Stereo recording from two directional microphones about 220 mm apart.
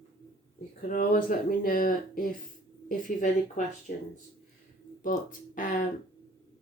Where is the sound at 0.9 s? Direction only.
40° left (ahead or behind).